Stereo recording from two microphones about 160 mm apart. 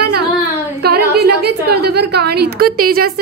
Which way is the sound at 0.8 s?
80° right.